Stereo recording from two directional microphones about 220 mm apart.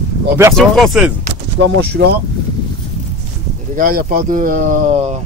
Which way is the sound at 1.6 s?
50° right (ahead or behind).